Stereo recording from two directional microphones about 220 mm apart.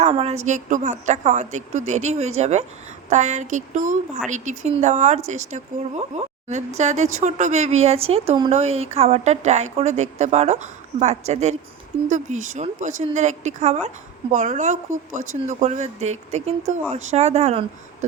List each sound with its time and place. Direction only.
0.0 s a woman's voice: 30° right (ahead or behind)